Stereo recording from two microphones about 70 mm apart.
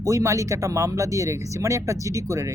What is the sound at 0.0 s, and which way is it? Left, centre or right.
Speech, right.